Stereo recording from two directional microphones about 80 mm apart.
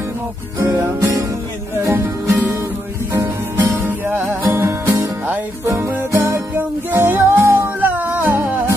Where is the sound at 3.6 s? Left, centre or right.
Right.